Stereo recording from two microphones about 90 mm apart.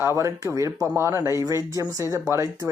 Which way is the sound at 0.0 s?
30° right (ahead or behind).